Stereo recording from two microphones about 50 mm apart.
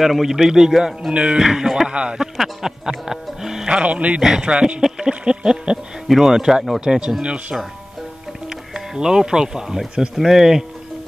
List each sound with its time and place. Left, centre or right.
0.0 s a man's voice: centre
1.1 s speech: right
1.4 s a man's voice: centre
2.3 s music: centre
3.6 s speech: right
4.2 s a man's voice: centre
4.8 s a sound: centre
6.0 s a man's voice: centre
8.5 s speech: centre